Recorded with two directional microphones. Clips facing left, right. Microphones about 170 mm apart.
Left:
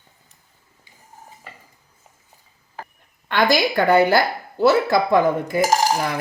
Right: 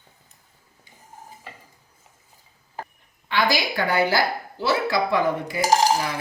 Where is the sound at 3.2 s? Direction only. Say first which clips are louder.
Left 5 dB; 50° left (ahead or behind).